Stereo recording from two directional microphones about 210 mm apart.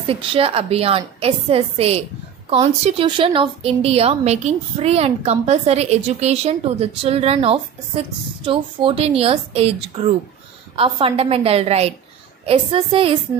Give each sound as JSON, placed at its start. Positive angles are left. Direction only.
{"t": 0.0, "sound": "a woman's voice", "side_deg": -25}